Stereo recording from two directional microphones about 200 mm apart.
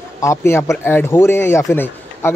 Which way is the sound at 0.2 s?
15° left (ahead or behind).